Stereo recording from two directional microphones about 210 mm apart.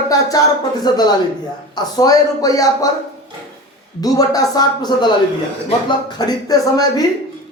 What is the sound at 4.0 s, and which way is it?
Speech, 15° left (ahead or behind).